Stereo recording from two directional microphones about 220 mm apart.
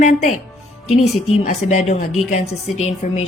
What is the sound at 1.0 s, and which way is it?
Speech, 85° left.